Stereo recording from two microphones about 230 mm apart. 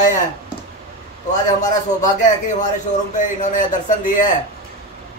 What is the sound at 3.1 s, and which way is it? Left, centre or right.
A man's voice, left.